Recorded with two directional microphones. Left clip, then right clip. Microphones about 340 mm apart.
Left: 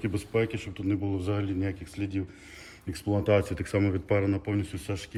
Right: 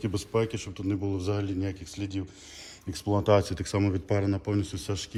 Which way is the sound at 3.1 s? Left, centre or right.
Centre.